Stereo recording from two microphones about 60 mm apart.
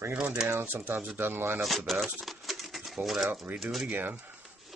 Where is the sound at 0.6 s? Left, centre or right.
Right.